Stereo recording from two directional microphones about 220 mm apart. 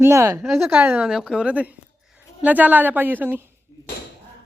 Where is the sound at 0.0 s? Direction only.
15° right (ahead or behind).